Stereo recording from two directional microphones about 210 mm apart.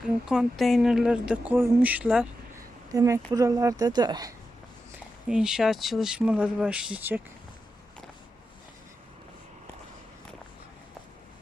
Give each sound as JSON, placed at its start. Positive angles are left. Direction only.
{"t": 0.0, "sound": "speech", "side_deg": -5}
{"t": 2.9, "sound": "speech", "side_deg": -15}
{"t": 5.3, "sound": "speech", "side_deg": -5}